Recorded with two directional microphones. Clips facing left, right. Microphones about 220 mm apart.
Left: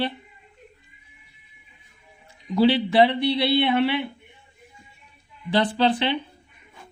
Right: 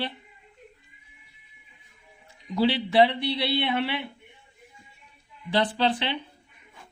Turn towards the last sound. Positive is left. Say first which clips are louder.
# left 5 dB
turn(degrees=50)  # may be behind; listen again after turning